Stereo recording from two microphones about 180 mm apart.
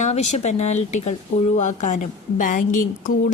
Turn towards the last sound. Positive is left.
turn(degrees=50)  # may be behind; listen again after turning